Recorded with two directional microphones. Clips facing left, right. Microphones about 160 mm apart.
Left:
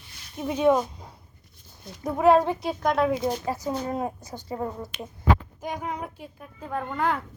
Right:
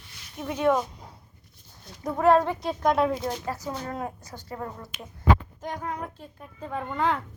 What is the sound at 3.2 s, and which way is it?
Speech, 15° left (ahead or behind).